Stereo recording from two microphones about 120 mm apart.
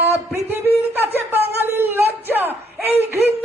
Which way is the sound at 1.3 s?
15° right (ahead or behind).